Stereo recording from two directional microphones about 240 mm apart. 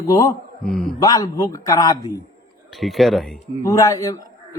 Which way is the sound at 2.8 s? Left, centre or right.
Centre.